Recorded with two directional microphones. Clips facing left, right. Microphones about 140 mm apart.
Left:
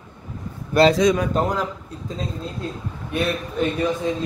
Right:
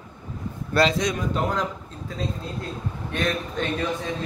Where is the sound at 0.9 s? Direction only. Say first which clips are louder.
Left 7 dB; 90° left.